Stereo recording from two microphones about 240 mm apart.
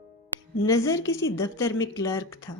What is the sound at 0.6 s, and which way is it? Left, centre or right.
Speech, centre.